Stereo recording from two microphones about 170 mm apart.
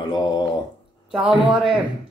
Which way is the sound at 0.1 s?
25° left (ahead or behind).